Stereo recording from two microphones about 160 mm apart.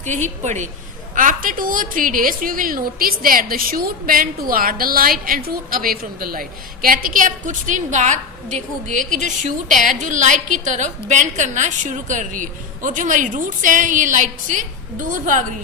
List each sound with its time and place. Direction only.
0.0 s a woman's voice: 50° right (ahead or behind)